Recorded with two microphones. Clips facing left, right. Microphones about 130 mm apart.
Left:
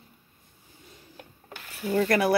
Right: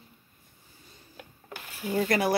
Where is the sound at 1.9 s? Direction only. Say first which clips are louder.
Left 3 dB; 45° left (ahead or behind).